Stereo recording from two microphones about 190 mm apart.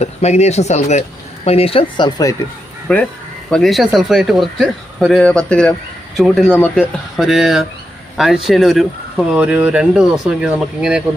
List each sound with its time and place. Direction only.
0.0 s speech: 35° left (ahead or behind)
2.8 s a man's voice: 10° left (ahead or behind)